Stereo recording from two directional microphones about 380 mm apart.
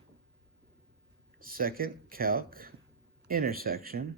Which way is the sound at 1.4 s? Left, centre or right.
Right.